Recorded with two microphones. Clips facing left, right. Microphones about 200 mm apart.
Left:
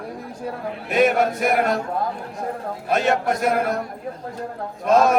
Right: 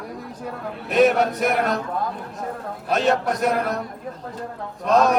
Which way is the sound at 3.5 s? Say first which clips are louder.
Left 2 dB; 45° left (ahead or behind).